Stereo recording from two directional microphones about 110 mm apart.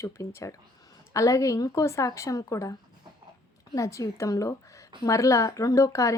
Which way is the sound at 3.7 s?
30° left (ahead or behind).